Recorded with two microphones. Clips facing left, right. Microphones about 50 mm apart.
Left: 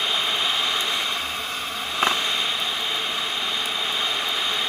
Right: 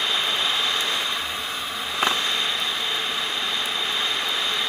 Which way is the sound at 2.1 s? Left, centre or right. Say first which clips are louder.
Even; left.